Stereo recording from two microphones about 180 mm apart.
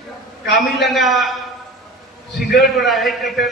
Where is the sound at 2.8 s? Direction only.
Centre (ahead or behind).